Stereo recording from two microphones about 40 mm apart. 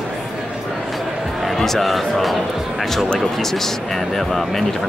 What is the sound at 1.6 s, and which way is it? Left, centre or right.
Speech, centre.